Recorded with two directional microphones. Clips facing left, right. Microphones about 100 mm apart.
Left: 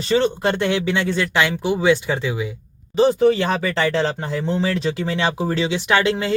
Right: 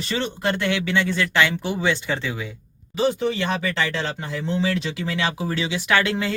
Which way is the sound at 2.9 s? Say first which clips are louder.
Left 7 dB; 45° left (ahead or behind).